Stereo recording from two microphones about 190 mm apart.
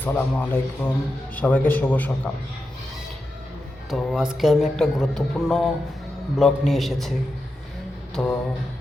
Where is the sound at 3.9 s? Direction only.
Centre (ahead or behind).